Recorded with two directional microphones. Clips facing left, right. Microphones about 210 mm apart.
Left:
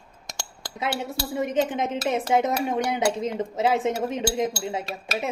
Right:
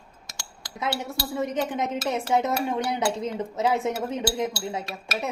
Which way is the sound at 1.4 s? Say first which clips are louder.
Left 3 dB; 20° left (ahead or behind).